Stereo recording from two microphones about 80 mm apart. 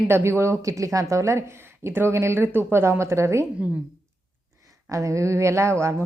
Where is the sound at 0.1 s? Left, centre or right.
Right.